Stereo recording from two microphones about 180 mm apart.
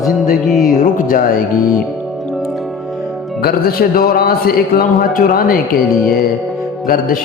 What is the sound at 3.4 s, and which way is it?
A man's voice, 60° left (ahead or behind).